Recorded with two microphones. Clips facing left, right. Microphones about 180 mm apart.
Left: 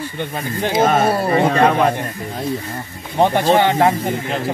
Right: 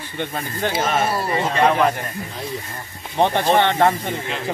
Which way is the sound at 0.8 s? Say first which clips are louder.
Left 7 dB; 55° left (ahead or behind).